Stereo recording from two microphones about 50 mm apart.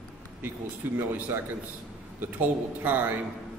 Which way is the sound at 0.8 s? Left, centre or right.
Right.